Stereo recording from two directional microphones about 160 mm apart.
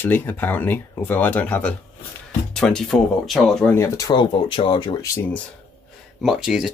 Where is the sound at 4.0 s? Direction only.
25° left (ahead or behind).